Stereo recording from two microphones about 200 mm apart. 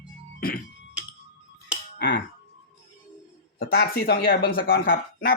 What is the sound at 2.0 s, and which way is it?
Speech, 55° left (ahead or behind).